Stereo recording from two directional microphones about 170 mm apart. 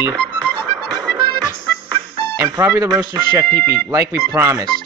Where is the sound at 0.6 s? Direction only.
25° right (ahead or behind).